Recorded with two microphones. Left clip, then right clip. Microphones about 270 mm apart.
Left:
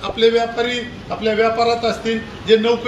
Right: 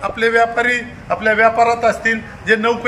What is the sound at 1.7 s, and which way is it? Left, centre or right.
Speech, right.